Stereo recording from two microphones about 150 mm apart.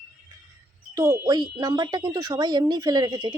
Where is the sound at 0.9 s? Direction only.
20° right (ahead or behind).